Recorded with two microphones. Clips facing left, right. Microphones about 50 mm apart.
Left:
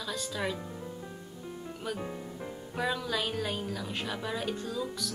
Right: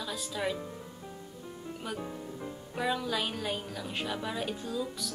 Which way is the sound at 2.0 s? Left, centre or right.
Centre.